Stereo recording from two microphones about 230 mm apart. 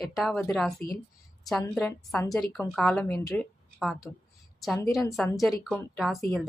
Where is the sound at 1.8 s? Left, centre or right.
Centre.